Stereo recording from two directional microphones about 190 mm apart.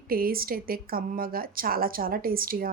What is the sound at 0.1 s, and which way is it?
A woman's voice, 50° right (ahead or behind).